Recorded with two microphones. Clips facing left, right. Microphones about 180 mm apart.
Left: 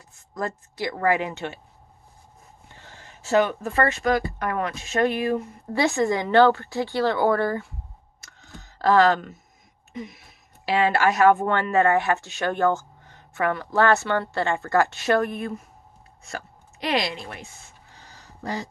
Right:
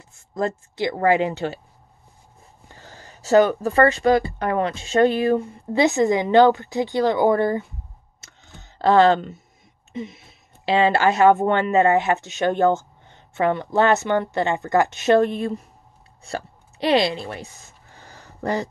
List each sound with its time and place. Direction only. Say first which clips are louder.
0.3 s speech: right 5 dB; 25° right (ahead or behind)
2.7 s speech: right 4 dB; 40° right (ahead or behind)
5.7 s speech: right 4 dB; 20° right (ahead or behind)
8.2 s clicking: left 2 dB; 25° right (ahead or behind)
9.9 s speech: right 4 dB; 25° right (ahead or behind)
16.3 s a sound: right 6 dB; 30° right (ahead or behind); by 18.7 s 60° right (ahead or behind)